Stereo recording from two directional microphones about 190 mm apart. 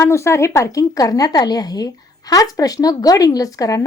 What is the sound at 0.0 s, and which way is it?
A woman's voice, 15° left (ahead or behind).